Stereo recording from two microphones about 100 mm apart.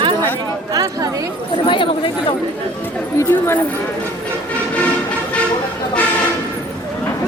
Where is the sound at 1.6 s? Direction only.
55° left (ahead or behind).